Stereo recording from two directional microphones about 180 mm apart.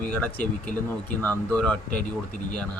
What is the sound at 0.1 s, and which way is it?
Speech, 5° left (ahead or behind).